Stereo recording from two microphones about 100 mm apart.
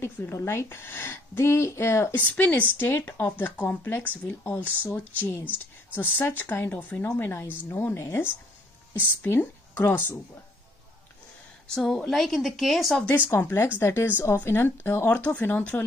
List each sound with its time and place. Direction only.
0.0 s a woman's voice: 25° left (ahead or behind)
2.3 s a woman's voice: 15° left (ahead or behind)
11.6 s a woman's voice: 5° left (ahead or behind)
13.0 s a woman's voice: 20° left (ahead or behind)